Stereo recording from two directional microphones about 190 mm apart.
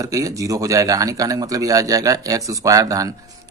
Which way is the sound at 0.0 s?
15° right (ahead or behind).